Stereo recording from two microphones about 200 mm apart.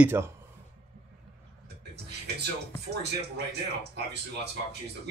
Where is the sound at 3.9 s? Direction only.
55° right (ahead or behind).